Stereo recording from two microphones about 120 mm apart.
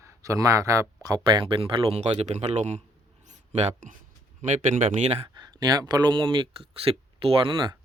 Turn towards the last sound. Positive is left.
turn(degrees=-40)  # may be behind; listen again after turning